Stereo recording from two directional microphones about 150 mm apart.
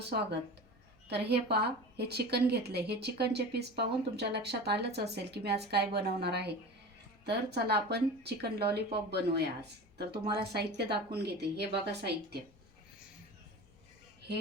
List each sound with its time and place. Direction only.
1.0 s a woman's voice: 90° right